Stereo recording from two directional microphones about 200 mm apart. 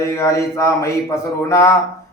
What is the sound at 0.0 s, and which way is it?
Mantra, 15° left (ahead or behind).